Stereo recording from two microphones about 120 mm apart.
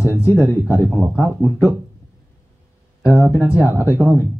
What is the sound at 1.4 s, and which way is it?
Speech, 20° left (ahead or behind).